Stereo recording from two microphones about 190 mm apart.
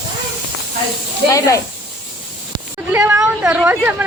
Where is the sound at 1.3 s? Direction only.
15° left (ahead or behind).